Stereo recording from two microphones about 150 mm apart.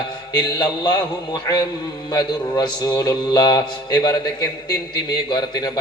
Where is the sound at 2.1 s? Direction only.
25° left (ahead or behind).